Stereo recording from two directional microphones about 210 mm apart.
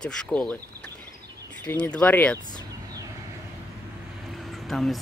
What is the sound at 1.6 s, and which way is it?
Speech, 5° left (ahead or behind).